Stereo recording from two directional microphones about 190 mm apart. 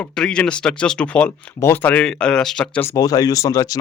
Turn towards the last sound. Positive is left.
turn(degrees=20)  # may be behind; listen again after turning